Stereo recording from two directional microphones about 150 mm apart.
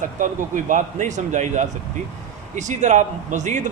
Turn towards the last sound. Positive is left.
turn(degrees=-55)  # may be behind; listen again after turning